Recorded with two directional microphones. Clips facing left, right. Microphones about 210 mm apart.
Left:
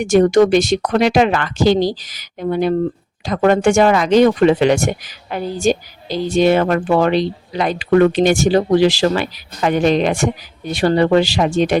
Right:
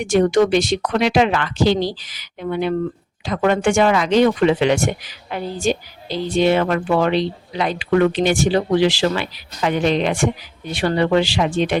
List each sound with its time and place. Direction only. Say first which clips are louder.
0.0 s speech: left 4 dB; 45° left (ahead or behind)